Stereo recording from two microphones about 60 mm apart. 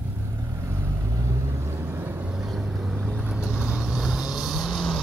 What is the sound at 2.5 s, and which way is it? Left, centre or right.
Vehicle, centre.